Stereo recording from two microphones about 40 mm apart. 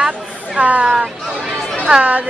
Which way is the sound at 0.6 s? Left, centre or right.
Right.